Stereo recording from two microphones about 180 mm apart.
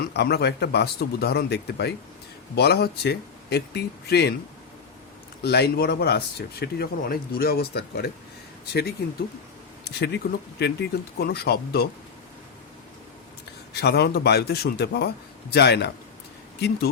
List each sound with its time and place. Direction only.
0.0 s speech: 65° left (ahead or behind)
5.4 s speech: 65° left (ahead or behind)
13.7 s speech: 65° left (ahead or behind)